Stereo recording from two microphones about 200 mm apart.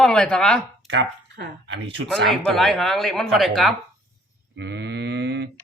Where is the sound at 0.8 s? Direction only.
60° right (ahead or behind).